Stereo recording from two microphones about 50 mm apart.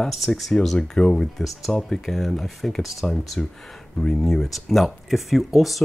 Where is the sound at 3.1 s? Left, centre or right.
Centre.